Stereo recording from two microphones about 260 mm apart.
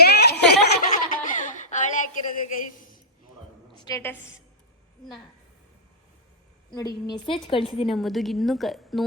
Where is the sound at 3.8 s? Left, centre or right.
Centre.